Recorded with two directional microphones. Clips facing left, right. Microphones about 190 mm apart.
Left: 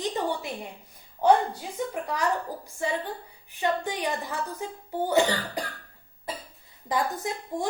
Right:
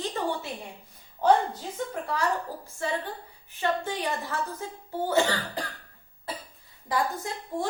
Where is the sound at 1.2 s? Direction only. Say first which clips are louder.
Left 1 dB; 10° left (ahead or behind).